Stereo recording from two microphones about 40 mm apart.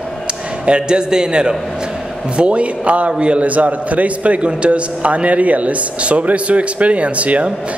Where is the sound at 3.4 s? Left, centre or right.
Right.